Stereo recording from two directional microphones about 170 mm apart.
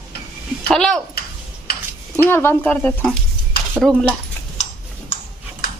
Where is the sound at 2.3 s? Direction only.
15° left (ahead or behind).